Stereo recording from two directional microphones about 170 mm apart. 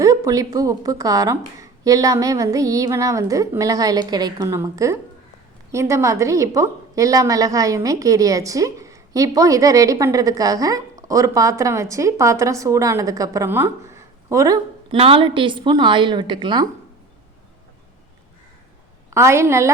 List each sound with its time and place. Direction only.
0.0 s a woman's voice: 20° right (ahead or behind)
14.9 s a woman's voice: 35° right (ahead or behind)
19.1 s a woman's voice: 15° right (ahead or behind)